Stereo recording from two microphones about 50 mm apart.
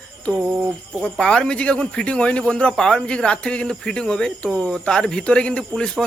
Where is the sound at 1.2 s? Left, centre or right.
Centre.